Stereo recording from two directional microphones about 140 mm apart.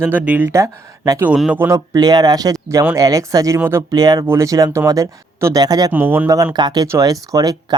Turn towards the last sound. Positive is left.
turn(degrees=-25)  # may be behind; listen again after turning